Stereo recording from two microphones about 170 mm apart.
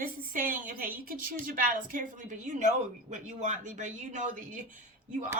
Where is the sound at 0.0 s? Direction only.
55° right (ahead or behind).